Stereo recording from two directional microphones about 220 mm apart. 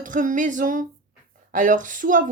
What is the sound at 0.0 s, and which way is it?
Speech, 35° right (ahead or behind).